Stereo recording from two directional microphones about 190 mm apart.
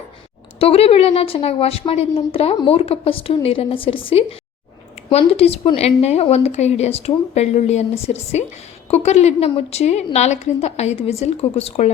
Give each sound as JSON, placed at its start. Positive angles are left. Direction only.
{"t": 0.6, "sound": "speech", "side_deg": 30}